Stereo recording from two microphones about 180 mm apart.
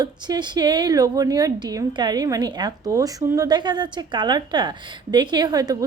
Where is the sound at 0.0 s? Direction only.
25° right (ahead or behind).